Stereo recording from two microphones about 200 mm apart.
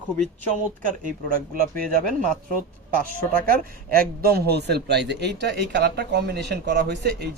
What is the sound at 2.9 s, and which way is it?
Speech, 45° right (ahead or behind).